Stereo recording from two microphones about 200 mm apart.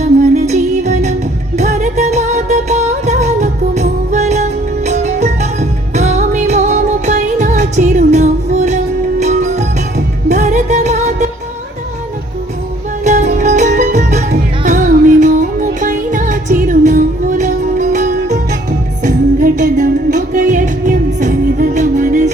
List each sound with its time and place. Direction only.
0.0 s music: 35° right (ahead or behind)
13.1 s music: 35° right (ahead or behind)